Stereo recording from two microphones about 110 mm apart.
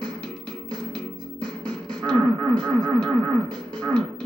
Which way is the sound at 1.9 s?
10° left (ahead or behind).